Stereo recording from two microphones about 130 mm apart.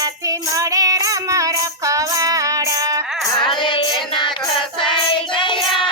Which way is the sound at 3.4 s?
35° left (ahead or behind).